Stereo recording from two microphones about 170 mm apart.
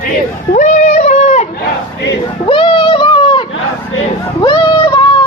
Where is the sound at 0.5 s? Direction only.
45° left (ahead or behind).